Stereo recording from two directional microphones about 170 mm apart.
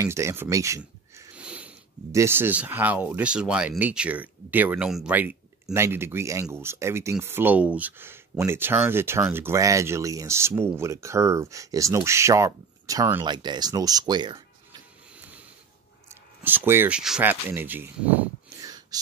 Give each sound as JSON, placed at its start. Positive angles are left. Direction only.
{"t": 0.0, "sound": "speech", "side_deg": -15}
{"t": 1.3, "sound": "sniff", "side_deg": -5}
{"t": 2.1, "sound": "speech", "side_deg": -15}
{"t": 15.1, "sound": "a sound", "side_deg": -10}
{"t": 16.1, "sound": "speech", "side_deg": -10}
{"t": 18.6, "sound": "a sound", "side_deg": -20}